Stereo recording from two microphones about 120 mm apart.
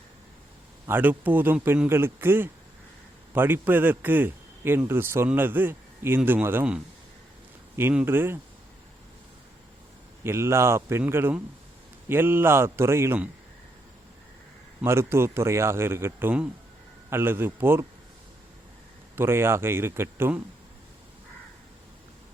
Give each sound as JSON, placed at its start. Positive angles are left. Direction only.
{"t": 0.9, "sound": "a man's voice", "side_deg": -15}
{"t": 8.0, "sound": "speech", "side_deg": -20}
{"t": 10.2, "sound": "speech", "side_deg": -20}
{"t": 14.8, "sound": "speech", "side_deg": -20}
{"t": 19.1, "sound": "speech", "side_deg": -20}